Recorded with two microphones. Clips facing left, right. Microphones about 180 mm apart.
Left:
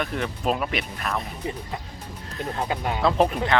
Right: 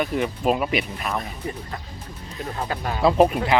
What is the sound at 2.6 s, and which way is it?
Speech, 15° left (ahead or behind).